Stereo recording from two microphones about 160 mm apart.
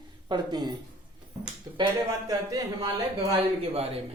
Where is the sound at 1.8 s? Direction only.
25° right (ahead or behind).